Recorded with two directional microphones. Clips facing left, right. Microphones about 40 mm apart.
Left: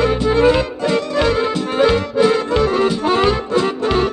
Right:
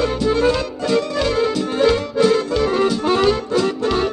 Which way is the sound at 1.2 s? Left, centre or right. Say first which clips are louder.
Left 2 dB; left.